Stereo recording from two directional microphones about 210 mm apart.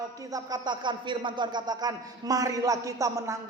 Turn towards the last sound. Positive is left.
turn(degrees=-15)  # may be behind; listen again after turning